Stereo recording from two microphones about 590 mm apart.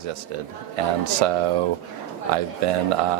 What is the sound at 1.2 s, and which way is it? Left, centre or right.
Speech, right.